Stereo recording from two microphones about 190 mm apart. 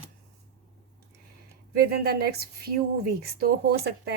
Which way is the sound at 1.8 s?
55° right (ahead or behind).